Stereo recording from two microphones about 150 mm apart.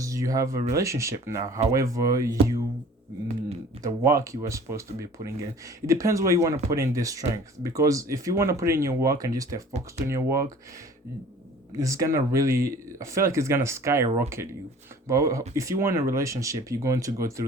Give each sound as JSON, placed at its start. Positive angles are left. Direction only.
{"t": 0.0, "sound": "speech", "side_deg": -20}
{"t": 3.8, "sound": "speech", "side_deg": -20}
{"t": 11.8, "sound": "speech", "side_deg": -20}